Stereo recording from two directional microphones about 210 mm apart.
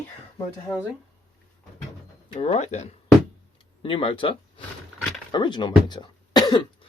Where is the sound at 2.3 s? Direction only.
30° left (ahead or behind).